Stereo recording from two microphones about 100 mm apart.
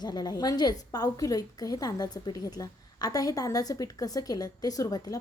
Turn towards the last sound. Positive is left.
turn(degrees=40)  # may be behind; listen again after turning